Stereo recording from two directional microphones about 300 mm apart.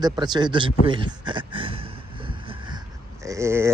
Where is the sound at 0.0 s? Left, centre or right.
Centre.